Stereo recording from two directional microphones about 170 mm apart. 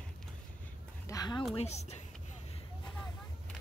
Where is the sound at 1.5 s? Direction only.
40° left (ahead or behind).